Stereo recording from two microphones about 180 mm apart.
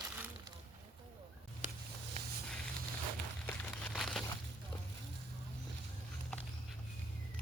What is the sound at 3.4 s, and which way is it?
Crumpling, 5° left (ahead or behind).